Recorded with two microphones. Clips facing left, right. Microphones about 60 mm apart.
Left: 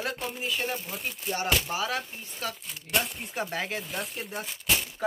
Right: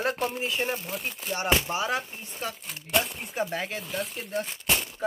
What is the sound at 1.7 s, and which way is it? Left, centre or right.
Speech, centre.